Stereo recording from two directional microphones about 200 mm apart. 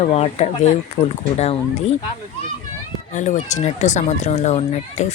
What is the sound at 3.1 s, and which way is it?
Speech, 35° left (ahead or behind).